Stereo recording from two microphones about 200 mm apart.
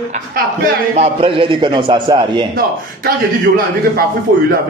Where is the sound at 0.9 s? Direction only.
25° right (ahead or behind).